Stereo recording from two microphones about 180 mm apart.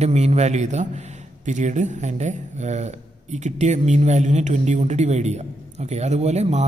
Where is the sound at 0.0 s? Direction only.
35° right (ahead or behind).